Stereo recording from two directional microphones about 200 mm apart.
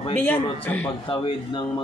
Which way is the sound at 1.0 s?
25° left (ahead or behind).